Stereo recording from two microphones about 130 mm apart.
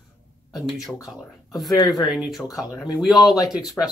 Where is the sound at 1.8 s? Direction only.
30° left (ahead or behind).